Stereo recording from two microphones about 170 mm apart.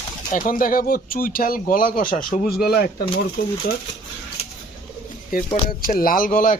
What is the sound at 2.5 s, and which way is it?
Speech, 65° left (ahead or behind).